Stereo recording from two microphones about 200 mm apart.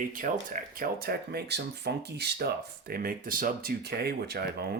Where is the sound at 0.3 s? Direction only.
40° right (ahead or behind).